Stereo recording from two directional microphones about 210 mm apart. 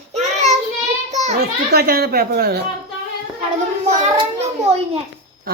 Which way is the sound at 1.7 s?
45° right (ahead or behind).